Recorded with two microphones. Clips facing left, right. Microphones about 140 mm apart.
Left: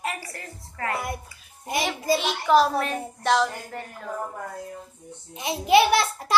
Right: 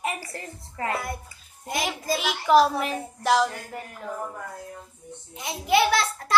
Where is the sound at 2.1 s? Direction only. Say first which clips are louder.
Right 1 dB; 5° right (ahead or behind).